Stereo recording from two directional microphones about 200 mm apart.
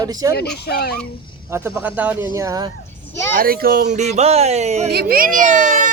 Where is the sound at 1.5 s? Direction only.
5° right (ahead or behind).